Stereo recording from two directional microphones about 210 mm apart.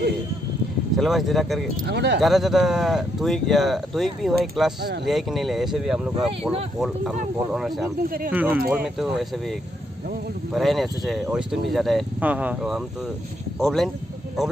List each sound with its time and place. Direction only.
0.9 s speech: centre (ahead or behind)
1.9 s speech: 55° right (ahead or behind)
2.2 s speech: centre (ahead or behind)
8.0 s speech: 45° right (ahead or behind)
8.3 s speech: 10° right (ahead or behind)
10.5 s speech: centre (ahead or behind)